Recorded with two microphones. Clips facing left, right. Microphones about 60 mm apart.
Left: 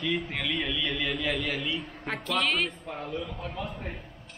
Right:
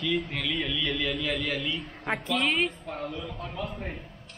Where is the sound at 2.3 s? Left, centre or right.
Centre.